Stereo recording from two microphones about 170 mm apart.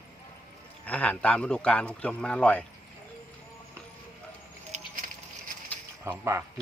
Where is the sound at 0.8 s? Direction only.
10° left (ahead or behind).